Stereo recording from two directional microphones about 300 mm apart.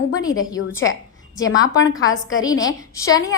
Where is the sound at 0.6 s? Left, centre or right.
Left.